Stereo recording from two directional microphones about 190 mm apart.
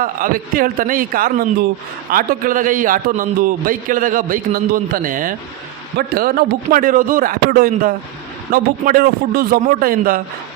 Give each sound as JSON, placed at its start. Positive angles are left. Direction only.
{"t": 0.0, "sound": "a man's voice", "side_deg": -45}